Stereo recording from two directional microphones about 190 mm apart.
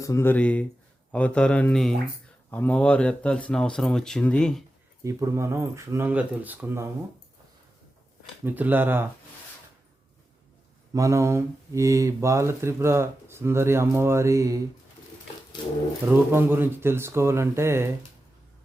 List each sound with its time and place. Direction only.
0.0 s speech: 15° left (ahead or behind)
5.0 s speech: 15° right (ahead or behind)
8.4 s speech: 10° right (ahead or behind)
10.9 s speech: 15° right (ahead or behind)
16.0 s speech: 10° right (ahead or behind)